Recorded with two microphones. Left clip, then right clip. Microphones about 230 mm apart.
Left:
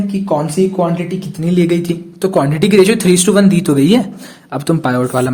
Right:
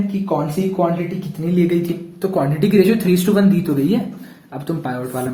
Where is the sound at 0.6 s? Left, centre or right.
Left.